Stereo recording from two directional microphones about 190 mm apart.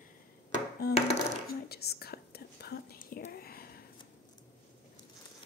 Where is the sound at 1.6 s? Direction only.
55° left (ahead or behind).